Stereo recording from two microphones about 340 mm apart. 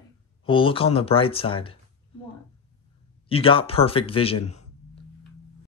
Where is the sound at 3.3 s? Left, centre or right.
Centre.